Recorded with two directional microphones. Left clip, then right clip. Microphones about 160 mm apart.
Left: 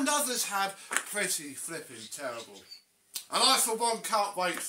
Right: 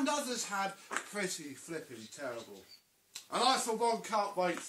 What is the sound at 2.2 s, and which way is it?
Speech, 10° left (ahead or behind).